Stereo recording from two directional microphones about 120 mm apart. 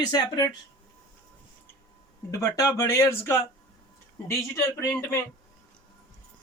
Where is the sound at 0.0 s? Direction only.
35° left (ahead or behind).